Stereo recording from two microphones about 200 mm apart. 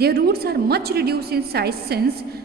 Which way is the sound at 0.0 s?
50° right (ahead or behind).